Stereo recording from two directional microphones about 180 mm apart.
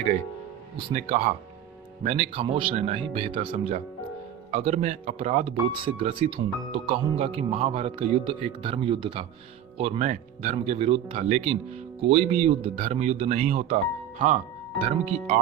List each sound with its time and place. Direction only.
0.9 s speech: 35° right (ahead or behind)